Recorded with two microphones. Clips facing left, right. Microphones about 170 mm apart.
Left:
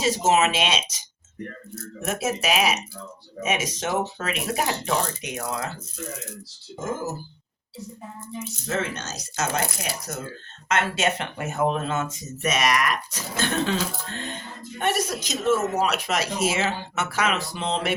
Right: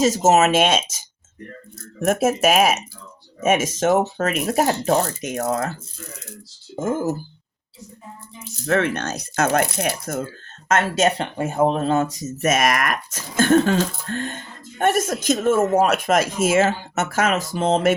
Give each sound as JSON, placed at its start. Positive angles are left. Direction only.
{"t": 0.0, "sound": "speech", "side_deg": -45}
{"t": 2.0, "sound": "speech", "side_deg": -50}
{"t": 6.7, "sound": "speech", "side_deg": -55}
{"t": 8.6, "sound": "speech", "side_deg": -65}
{"t": 10.7, "sound": "speech", "side_deg": -40}